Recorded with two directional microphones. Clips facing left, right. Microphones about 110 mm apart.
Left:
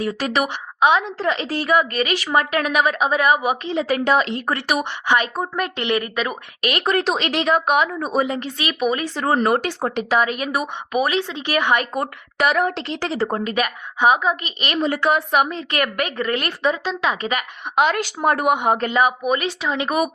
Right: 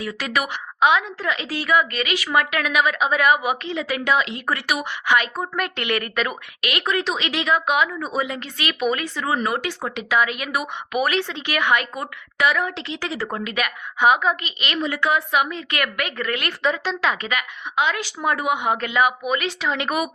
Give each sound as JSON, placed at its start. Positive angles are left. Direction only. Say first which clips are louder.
{"t": 0.0, "sound": "a woman's voice", "louder": "left 4 dB", "side_deg": 35}
{"t": 6.6, "sound": "a woman's voice", "louder": "left 4 dB", "side_deg": 40}
{"t": 9.1, "sound": "a woman's voice", "louder": "left 5 dB", "side_deg": 45}
{"t": 16.6, "sound": "speech", "louder": "left 1 dB", "side_deg": 20}
{"t": 17.2, "sound": "a woman's voice", "louder": "left 3 dB", "side_deg": 30}
{"t": 17.7, "sound": "a woman's voice", "louder": "left 4 dB", "side_deg": 50}